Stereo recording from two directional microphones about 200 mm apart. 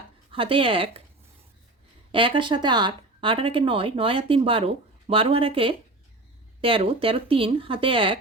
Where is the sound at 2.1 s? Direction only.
25° right (ahead or behind).